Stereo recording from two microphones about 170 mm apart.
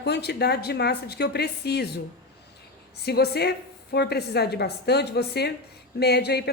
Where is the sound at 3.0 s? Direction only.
70° left (ahead or behind).